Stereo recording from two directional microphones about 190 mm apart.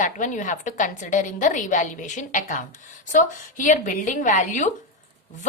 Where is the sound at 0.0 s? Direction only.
40° left (ahead or behind).